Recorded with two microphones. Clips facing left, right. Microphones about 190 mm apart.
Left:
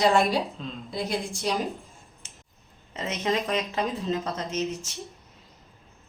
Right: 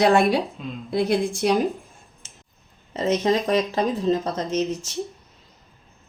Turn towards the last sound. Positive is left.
turn(degrees=-35)  # may be behind; listen again after turning